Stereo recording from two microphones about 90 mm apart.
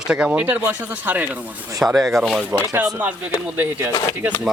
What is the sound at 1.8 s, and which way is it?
Speech, centre (ahead or behind).